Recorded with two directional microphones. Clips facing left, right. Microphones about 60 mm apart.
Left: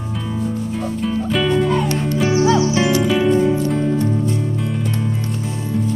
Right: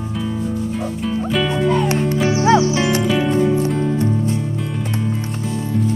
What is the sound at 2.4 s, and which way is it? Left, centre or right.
Music, right.